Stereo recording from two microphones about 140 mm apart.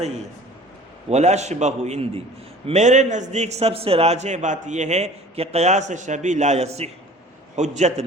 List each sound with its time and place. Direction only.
1.1 s a man's voice: 55° right (ahead or behind)